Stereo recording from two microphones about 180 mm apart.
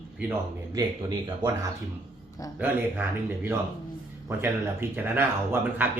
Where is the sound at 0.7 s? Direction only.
20° right (ahead or behind).